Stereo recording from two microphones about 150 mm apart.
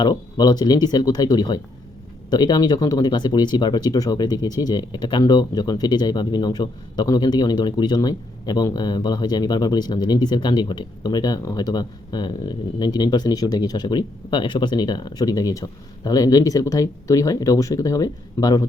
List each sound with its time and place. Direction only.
0.0 s speech: 25° left (ahead or behind)